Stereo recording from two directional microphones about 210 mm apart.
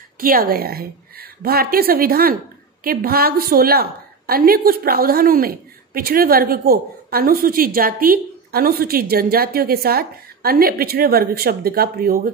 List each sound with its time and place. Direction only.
0.2 s a woman's voice: 45° right (ahead or behind)